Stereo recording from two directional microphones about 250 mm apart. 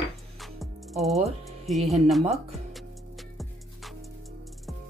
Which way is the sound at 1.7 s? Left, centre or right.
Centre.